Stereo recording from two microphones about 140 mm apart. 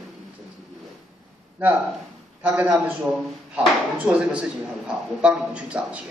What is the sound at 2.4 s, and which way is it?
Speech, 10° right (ahead or behind).